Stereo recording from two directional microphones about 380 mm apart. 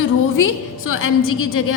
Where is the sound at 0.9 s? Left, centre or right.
Left.